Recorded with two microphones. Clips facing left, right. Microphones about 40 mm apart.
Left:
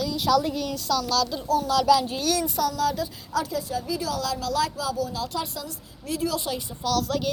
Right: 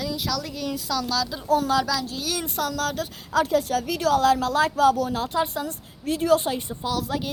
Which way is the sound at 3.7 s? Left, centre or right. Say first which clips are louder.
Right 3 dB; right.